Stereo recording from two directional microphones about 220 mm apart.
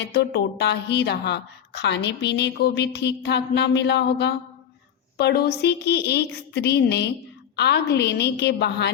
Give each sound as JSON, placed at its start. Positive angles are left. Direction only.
{"t": 0.1, "sound": "a woman's voice", "side_deg": 45}